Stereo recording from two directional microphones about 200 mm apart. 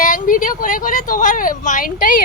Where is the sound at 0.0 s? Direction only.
40° left (ahead or behind).